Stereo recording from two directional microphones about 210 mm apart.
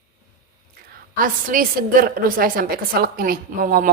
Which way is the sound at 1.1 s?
40° right (ahead or behind).